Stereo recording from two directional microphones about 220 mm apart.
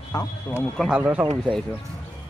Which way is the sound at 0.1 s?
15° left (ahead or behind).